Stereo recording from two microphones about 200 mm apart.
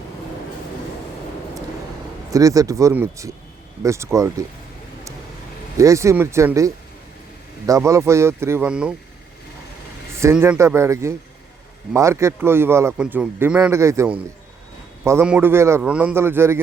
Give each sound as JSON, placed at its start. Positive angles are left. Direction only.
{"t": 2.3, "sound": "speech", "side_deg": -15}
{"t": 5.7, "sound": "speech", "side_deg": -15}
{"t": 10.3, "sound": "speech", "side_deg": -10}